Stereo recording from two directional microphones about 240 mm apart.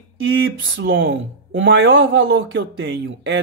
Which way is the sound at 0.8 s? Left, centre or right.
Right.